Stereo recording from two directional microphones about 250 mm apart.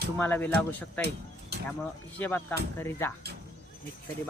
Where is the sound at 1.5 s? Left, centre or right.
Right.